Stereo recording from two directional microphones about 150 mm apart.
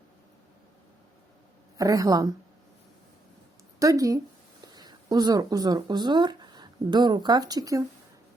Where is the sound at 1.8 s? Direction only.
25° right (ahead or behind).